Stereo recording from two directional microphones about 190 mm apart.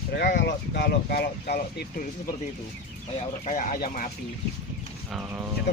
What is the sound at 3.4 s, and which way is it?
Speech, 40° left (ahead or behind).